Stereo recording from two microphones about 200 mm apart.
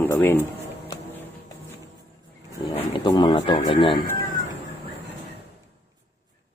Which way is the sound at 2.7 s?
25° left (ahead or behind).